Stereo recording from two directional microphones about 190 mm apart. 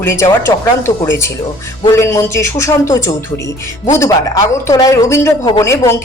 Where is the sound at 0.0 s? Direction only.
15° left (ahead or behind).